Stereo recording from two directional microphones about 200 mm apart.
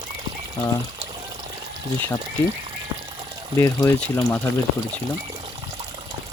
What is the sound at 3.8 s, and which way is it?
Speech, 10° left (ahead or behind).